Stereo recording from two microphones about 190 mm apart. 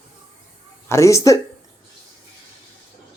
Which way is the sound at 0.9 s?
15° left (ahead or behind).